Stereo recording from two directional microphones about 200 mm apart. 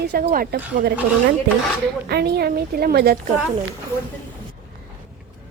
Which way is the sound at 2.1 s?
50° right (ahead or behind).